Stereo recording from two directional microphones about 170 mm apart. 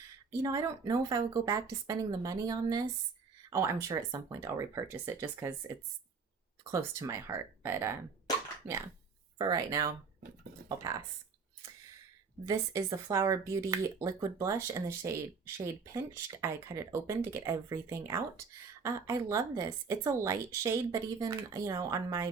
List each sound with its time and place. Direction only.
0.4 s speech: 20° right (ahead or behind)
9.4 s speech: 20° right (ahead or behind)
12.5 s speech: 20° right (ahead or behind)